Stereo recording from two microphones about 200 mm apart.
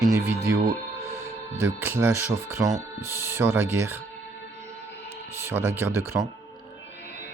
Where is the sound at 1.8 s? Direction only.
10° right (ahead or behind).